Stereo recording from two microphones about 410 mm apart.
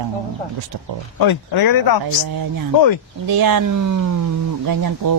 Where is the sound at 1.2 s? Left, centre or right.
Left.